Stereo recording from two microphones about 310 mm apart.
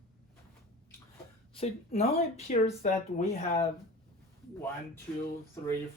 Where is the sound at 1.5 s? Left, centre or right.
Centre.